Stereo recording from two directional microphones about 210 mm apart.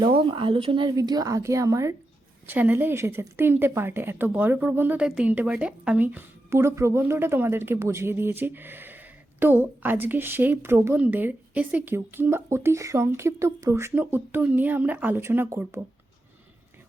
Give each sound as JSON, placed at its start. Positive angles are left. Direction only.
{"t": 0.2, "sound": "a woman's voice", "side_deg": -25}